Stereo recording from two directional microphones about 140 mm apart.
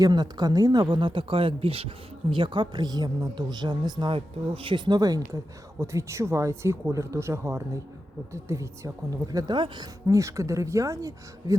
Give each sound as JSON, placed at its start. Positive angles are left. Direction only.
{"t": 0.0, "sound": "a woman's voice", "side_deg": -30}